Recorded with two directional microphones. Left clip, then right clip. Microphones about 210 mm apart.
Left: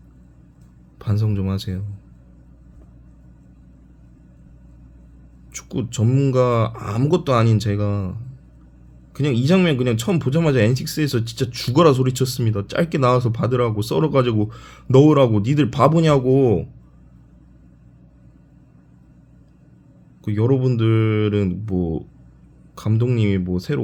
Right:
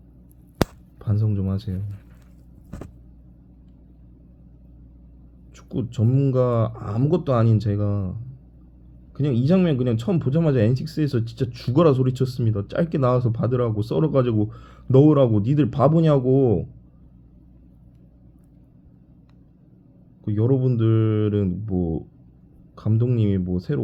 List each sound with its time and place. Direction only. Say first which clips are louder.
0.9 s speech: left 3 dB; 25° left (ahead or behind)
5.5 s speech: left 3 dB; 25° left (ahead or behind)
9.1 s speech: left 3 dB; 25° left (ahead or behind)
20.2 s speech: left 3 dB; 25° left (ahead or behind)